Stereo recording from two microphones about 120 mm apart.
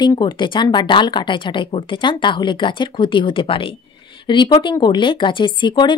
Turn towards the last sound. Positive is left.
turn(degrees=40)  # may be behind; listen again after turning